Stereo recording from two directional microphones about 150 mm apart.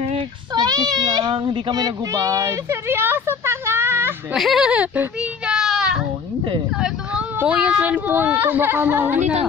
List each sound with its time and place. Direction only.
0.6 s speech: 25° right (ahead or behind)
4.4 s speech: centre (ahead or behind)
5.5 s a sound: 5° right (ahead or behind)
6.8 s speech: 10° right (ahead or behind)